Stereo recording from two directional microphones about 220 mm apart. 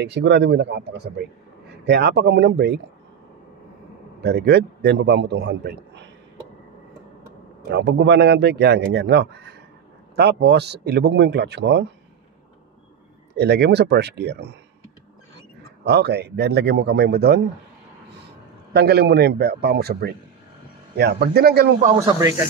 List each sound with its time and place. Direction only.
0.0 s speech: 50° right (ahead or behind)
4.2 s speech: 45° right (ahead or behind)
7.7 s speech: 50° right (ahead or behind)
13.3 s speech: 50° right (ahead or behind)
15.8 s speech: 50° right (ahead or behind)
18.7 s speech: 45° right (ahead or behind)